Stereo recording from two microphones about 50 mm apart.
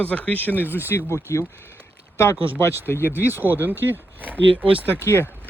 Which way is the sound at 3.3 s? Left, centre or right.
Right.